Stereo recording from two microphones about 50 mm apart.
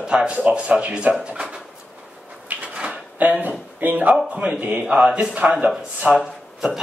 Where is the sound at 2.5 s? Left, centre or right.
Right.